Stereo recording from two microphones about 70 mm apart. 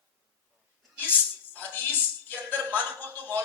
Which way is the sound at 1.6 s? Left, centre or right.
Left.